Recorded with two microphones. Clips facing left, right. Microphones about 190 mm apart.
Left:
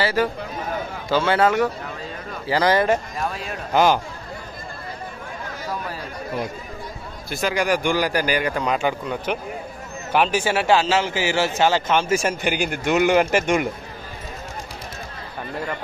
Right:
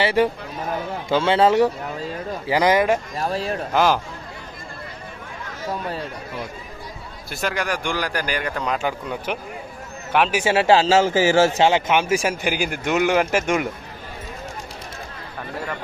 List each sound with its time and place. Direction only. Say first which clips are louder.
0.0 s speech: right 2 dB; 25° right (ahead or behind)
3.2 s a man's voice: right 4 dB; 35° right (ahead or behind)
3.7 s speech: left 2 dB; centre (ahead or behind)
7.2 s speech: left 4 dB; centre (ahead or behind)
10.7 s a man's voice: right 3 dB; 30° right (ahead or behind)
11.0 s a man's voice: right 6 dB; 45° right (ahead or behind)
11.6 s speech: right 1 dB; 15° right (ahead or behind); by 13.7 s centre (ahead or behind)